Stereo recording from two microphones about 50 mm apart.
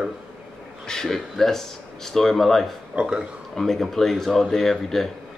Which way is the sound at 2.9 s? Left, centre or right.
Right.